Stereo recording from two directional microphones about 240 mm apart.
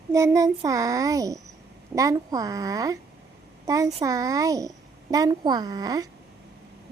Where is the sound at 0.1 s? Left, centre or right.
Centre.